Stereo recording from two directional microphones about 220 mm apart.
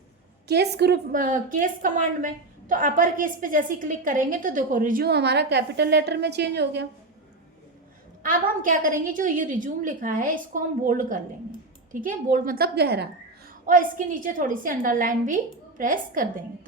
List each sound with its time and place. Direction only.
0.4 s a woman's voice: 50° right (ahead or behind)
8.2 s a woman's voice: 40° right (ahead or behind)
13.7 s a woman's voice: 35° right (ahead or behind)